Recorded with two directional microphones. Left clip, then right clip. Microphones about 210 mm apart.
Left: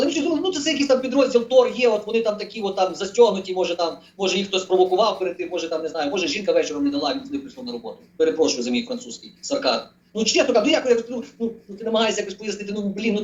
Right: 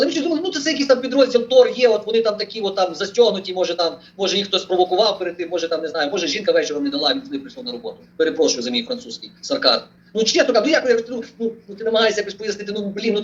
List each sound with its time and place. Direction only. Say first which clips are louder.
0.0 s speech: right 2 dB; 35° right (ahead or behind)